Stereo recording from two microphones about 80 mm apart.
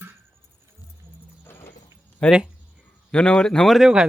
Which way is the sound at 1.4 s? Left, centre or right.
Left.